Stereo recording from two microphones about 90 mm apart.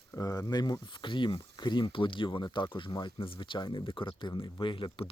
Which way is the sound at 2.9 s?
45° left (ahead or behind).